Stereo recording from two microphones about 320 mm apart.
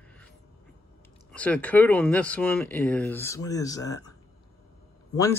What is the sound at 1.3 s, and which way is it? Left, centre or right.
Speech, centre.